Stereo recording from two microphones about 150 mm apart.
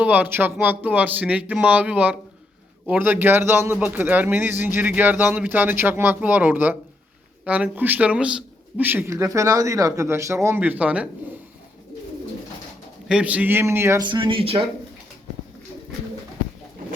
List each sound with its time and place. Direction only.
0.0 s a man's voice: 10° right (ahead or behind)
13.1 s a man's voice: 10° right (ahead or behind)
14.0 s speech: 35° right (ahead or behind)